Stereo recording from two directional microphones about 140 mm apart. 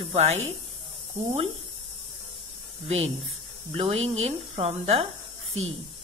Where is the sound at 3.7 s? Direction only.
45° right (ahead or behind).